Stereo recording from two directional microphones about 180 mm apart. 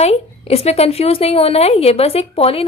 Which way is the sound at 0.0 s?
35° left (ahead or behind).